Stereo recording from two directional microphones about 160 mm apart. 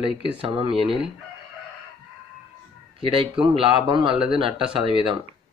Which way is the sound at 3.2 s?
30° right (ahead or behind).